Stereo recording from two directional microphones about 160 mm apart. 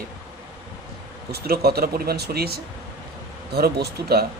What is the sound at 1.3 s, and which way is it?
Speech, 75° right (ahead or behind).